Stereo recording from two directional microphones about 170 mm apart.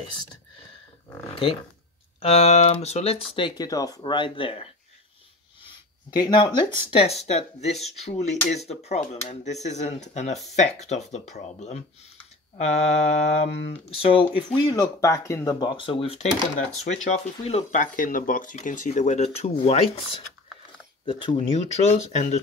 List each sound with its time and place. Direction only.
2.2 s speech: 40° left (ahead or behind)
6.1 s speech: 25° left (ahead or behind)
16.5 s speech: 45° left (ahead or behind)